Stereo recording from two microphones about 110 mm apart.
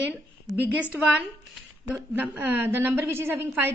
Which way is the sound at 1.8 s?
15° right (ahead or behind).